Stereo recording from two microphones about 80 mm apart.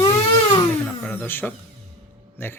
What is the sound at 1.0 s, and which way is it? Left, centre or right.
Speech, left.